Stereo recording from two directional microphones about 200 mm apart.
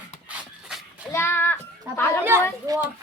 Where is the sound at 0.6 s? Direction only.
5° right (ahead or behind).